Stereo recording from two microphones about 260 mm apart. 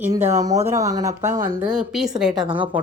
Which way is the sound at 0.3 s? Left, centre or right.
Centre.